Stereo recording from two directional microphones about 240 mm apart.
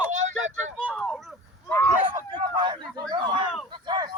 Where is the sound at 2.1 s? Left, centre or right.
Centre.